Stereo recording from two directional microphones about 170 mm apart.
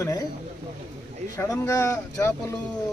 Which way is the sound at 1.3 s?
15° left (ahead or behind).